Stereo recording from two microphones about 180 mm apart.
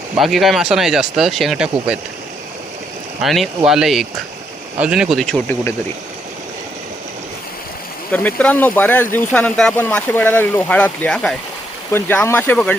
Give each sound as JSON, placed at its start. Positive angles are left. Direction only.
{"t": 0.2, "sound": "speech", "side_deg": 0}
{"t": 3.2, "sound": "speech", "side_deg": 0}
{"t": 8.1, "sound": "speech", "side_deg": 10}